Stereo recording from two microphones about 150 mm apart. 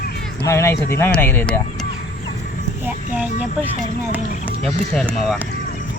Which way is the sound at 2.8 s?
10° right (ahead or behind).